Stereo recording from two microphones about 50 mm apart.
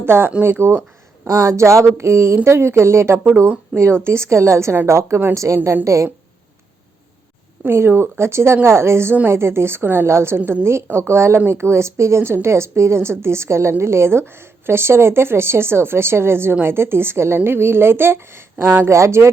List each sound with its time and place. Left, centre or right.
0.0 s speech: right
1.2 s a woman's voice: right
5.3 s a woman's voice: right
7.8 s a woman's voice: right
10.1 s a woman's voice: right
18.9 s speech: right